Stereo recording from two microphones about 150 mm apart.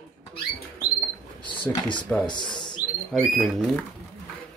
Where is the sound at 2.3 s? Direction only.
30° left (ahead or behind).